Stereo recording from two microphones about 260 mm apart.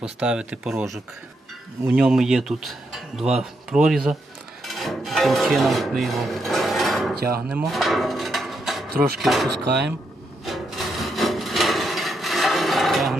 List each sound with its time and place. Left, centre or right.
0.0 s speech: centre
4.6 s filing: centre
7.4 s speech: centre
8.9 s speech: right
9.2 s speech: centre
9.6 s speech: right
10.4 s wood: centre